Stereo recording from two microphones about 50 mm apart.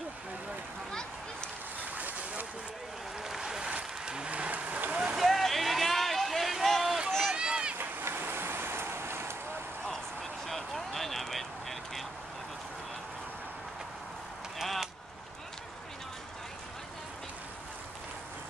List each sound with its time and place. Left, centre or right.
2.0 s a sound: right
3.3 s boat: centre
3.7 s vehicle: centre
5.1 s vehicle: centre
7.1 s run: centre
7.3 s a sound: centre
7.7 s cat: right
10.4 s vehicle: centre
14.6 s a sound: centre